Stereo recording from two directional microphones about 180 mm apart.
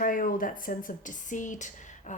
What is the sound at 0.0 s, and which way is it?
Speech, 50° left (ahead or behind).